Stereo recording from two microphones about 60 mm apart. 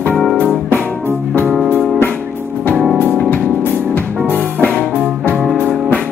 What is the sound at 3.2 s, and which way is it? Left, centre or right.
Music, left.